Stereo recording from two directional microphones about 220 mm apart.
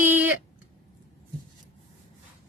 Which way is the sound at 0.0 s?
10° right (ahead or behind).